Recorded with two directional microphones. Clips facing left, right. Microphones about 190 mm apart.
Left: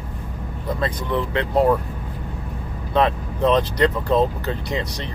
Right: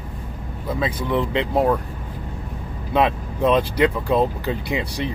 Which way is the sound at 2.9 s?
15° right (ahead or behind).